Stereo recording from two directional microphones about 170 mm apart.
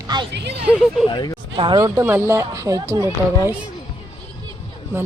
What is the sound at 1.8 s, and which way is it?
Speech, 15° right (ahead or behind).